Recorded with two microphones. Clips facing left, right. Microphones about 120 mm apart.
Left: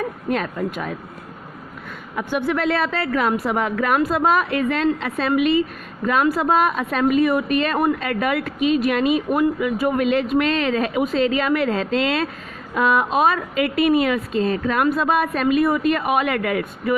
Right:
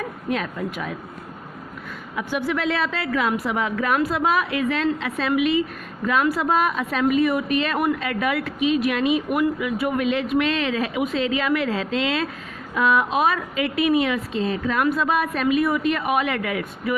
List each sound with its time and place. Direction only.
0.3 s a woman's voice: 45° left (ahead or behind)
2.1 s a woman's voice: 45° left (ahead or behind)